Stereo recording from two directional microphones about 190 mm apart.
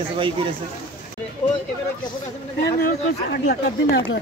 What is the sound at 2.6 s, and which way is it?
Speech, 60° left (ahead or behind).